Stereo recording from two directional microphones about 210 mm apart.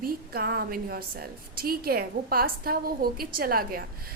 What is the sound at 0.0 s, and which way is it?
A woman's voice, 45° right (ahead or behind).